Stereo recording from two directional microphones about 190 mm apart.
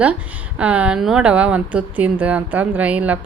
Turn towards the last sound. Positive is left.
turn(degrees=-5)  # may be behind; listen again after turning